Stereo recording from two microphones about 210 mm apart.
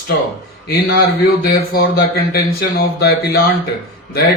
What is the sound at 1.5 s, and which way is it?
Speech, 45° left (ahead or behind).